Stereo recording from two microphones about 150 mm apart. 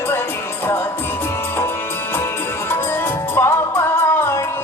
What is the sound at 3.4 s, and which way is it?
Music, 15° left (ahead or behind).